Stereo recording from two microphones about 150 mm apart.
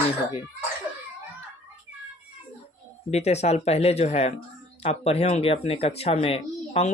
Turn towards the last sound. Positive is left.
turn(degrees=45)  # may be behind; listen again after turning